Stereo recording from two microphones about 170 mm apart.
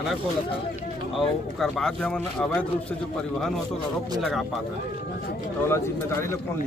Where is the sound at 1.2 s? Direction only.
Centre (ahead or behind).